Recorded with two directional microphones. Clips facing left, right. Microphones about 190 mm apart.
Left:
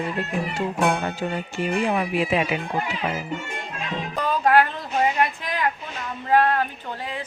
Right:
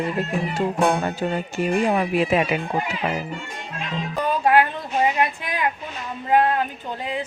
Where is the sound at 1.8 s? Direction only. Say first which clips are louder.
Right 3 dB; 45° right (ahead or behind).